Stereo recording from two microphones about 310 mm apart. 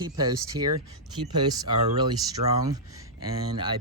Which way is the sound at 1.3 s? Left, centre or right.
Centre.